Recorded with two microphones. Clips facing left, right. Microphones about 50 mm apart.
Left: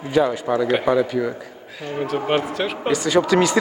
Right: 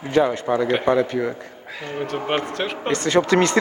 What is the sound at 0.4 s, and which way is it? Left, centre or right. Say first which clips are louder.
Speech: even; centre.